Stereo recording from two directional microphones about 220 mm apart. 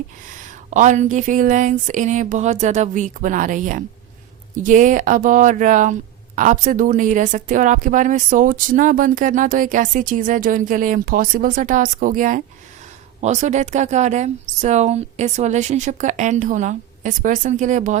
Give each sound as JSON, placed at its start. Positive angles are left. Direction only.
{"t": 0.7, "sound": "speech", "side_deg": -35}